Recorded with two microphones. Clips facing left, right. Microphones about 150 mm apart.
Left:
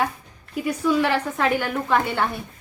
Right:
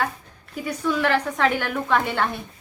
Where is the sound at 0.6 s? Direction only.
10° left (ahead or behind).